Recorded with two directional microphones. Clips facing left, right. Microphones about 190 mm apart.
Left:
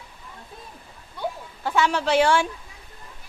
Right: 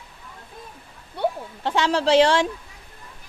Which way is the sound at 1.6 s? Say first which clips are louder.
Right 1 dB; 30° right (ahead or behind).